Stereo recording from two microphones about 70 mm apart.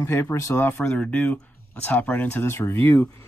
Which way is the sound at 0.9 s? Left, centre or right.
Centre.